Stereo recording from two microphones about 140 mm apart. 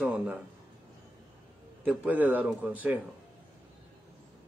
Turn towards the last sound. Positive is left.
turn(degrees=-10)  # may be behind; listen again after turning